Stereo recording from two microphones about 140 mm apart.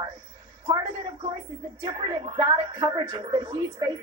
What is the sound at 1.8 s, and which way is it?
A woman's voice, 30° right (ahead or behind).